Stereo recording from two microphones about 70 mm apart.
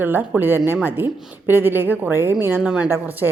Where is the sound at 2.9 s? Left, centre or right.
Right.